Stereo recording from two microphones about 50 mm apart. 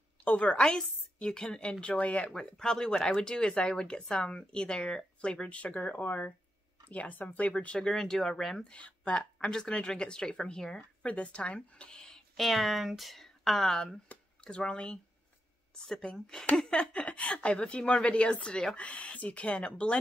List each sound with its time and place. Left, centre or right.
0.2 s a woman's voice: left
0.6 s a woman's voice: centre
2.3 s a woman's voice: centre
8.6 s speech: left
9.2 s speech: centre
10.8 s speech: left
12.4 s speech: centre
14.4 s a woman's voice: centre